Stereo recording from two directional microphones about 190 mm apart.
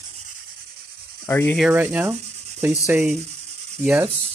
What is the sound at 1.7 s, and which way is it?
Speech, 10° right (ahead or behind).